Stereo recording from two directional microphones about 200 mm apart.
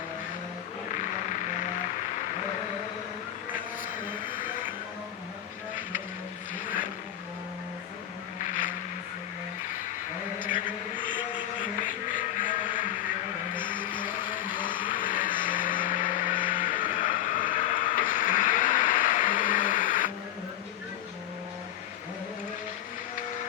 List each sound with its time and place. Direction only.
0.9 s music: 40° left (ahead or behind)
11.8 s music: 40° left (ahead or behind)
15.1 s vehicle: 40° left (ahead or behind)